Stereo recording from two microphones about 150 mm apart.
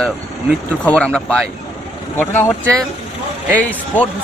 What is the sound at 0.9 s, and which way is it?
Speech, 5° left (ahead or behind).